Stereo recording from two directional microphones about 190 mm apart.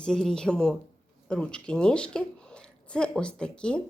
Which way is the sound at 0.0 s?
5° left (ahead or behind).